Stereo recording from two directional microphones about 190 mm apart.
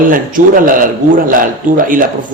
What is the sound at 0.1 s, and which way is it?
A man's voice, 45° right (ahead or behind).